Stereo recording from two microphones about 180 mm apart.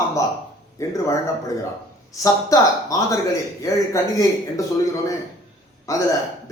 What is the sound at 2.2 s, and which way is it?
A man's voice, 20° left (ahead or behind).